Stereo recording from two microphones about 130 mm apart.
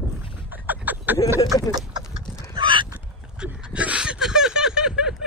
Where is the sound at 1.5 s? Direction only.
30° left (ahead or behind).